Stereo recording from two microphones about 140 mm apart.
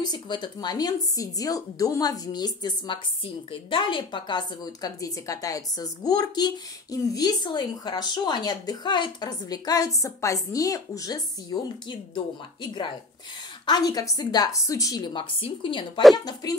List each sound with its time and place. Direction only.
0.0 s a woman's voice: 30° left (ahead or behind)
15.1 s a woman's voice: 35° left (ahead or behind)